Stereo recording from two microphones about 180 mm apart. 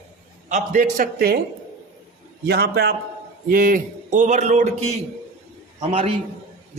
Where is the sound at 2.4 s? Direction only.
65° right (ahead or behind).